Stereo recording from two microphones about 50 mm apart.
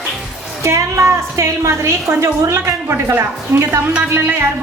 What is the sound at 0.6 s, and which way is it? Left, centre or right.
A woman's voice, right.